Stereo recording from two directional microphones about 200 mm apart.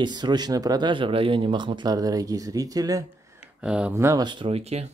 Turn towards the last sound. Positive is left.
turn(degrees=-30)  # may be behind; listen again after turning